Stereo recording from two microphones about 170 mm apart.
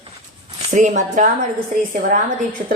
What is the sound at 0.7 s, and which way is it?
A woman's voice, 45° right (ahead or behind).